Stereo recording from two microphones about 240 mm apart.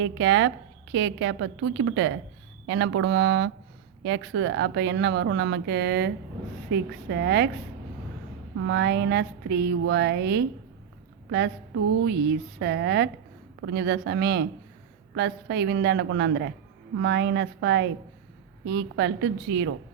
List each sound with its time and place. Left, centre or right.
0.0 s speech: right
8.5 s speech: right